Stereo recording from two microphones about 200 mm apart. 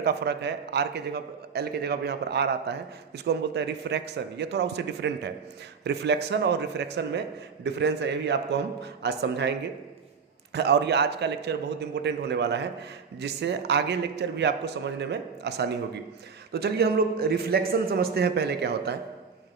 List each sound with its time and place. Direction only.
0.0 s a man's voice: 55° right (ahead or behind)